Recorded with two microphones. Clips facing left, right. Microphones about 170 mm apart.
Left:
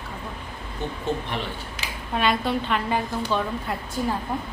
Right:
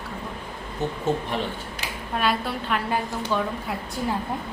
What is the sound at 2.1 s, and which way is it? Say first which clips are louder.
A woman's voice: left 2 dB; 5° right (ahead or behind).